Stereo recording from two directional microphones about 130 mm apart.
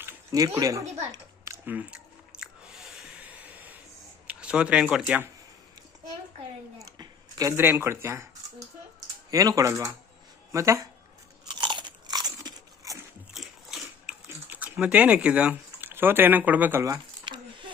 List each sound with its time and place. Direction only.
0.0 s a sound: 15° right (ahead or behind)
0.3 s speech: 25° right (ahead or behind)
1.6 s speech: 10° right (ahead or behind)
2.4 s squish: 5° right (ahead or behind)
4.3 s speech: 10° right (ahead or behind)
7.0 s a sound: 30° right (ahead or behind)
7.5 s speech: 15° right (ahead or behind)
9.3 s speech: 25° right (ahead or behind)
11.4 s crunch: 35° right (ahead or behind)
13.3 s a sound: 5° right (ahead or behind)
14.3 s speech: 10° right (ahead or behind)
16.8 s a sound: 30° right (ahead or behind)